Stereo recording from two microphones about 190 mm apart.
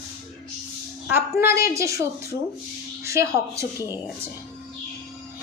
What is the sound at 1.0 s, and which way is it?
A woman's voice, 10° right (ahead or behind).